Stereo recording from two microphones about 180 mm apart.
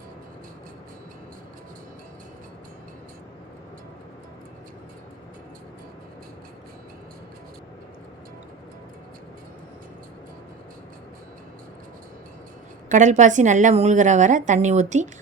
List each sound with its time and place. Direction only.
12.9 s a woman's voice: 45° right (ahead or behind)